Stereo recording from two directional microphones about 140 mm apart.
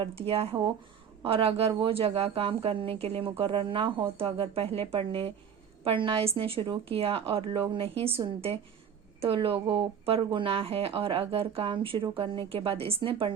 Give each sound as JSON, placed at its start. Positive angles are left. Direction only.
{"t": 0.0, "sound": "a woman's voice", "side_deg": -45}
{"t": 9.2, "sound": "speech", "side_deg": -40}